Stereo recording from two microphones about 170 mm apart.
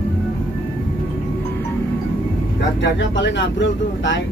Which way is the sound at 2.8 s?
90° left.